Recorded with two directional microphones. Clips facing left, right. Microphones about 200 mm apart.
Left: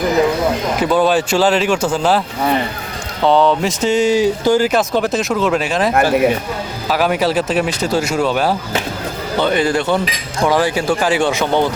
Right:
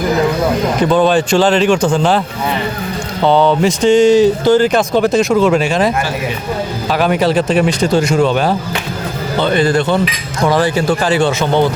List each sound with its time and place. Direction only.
0.8 s speech: 5° left (ahead or behind)
5.9 s speech: 60° left (ahead or behind)
6.9 s speech: 5° left (ahead or behind)